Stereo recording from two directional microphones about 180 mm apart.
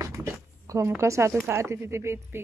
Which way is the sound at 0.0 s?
15° right (ahead or behind).